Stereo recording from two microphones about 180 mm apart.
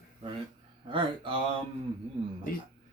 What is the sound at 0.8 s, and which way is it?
Speech, 30° right (ahead or behind).